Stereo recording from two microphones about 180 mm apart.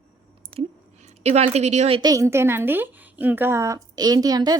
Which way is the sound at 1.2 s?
35° right (ahead or behind).